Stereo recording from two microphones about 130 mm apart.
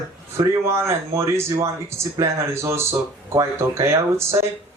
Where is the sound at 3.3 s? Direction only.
20° right (ahead or behind).